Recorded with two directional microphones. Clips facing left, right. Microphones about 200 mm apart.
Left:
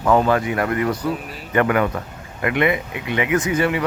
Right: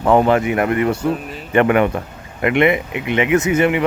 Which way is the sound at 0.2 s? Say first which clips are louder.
Right 4 dB; 20° right (ahead or behind).